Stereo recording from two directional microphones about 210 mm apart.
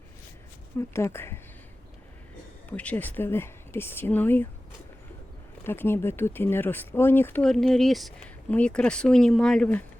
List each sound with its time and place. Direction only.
0.8 s speech: 10° left (ahead or behind)
2.6 s speech: 5° left (ahead or behind)
5.6 s speech: 10° left (ahead or behind)